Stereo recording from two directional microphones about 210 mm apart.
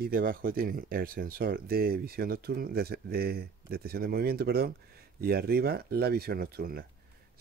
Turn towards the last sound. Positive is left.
turn(degrees=-45)  # may be behind; listen again after turning